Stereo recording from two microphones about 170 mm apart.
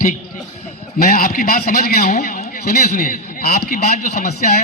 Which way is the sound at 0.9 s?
60° left (ahead or behind).